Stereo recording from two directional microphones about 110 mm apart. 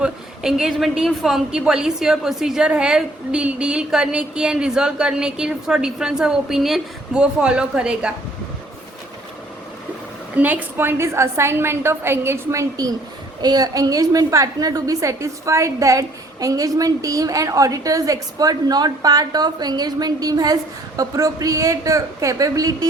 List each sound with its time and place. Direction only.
0.0 s a woman's voice: 5° right (ahead or behind)
10.3 s a woman's voice: 15° right (ahead or behind); by 22.9 s 30° right (ahead or behind)